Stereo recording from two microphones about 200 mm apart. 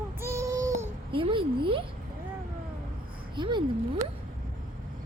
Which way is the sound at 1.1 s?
25° right (ahead or behind).